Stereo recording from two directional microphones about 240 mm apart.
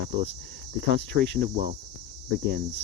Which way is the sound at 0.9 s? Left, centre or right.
Right.